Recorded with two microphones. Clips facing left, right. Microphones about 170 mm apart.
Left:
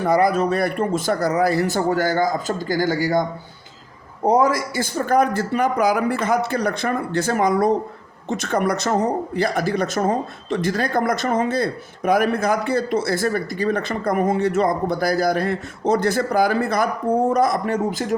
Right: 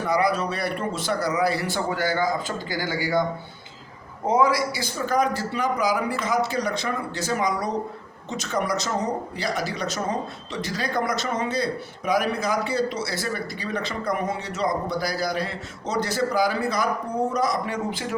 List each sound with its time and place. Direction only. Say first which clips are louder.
0.0 s speech: left 5 dB; 50° left (ahead or behind)
4.3 s a man's voice: left 3 dB; 45° left (ahead or behind)